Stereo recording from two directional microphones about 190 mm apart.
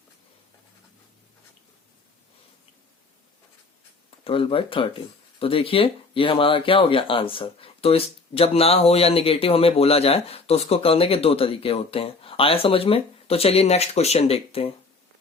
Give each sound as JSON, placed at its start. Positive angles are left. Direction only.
{"t": 4.2, "sound": "speech", "side_deg": 30}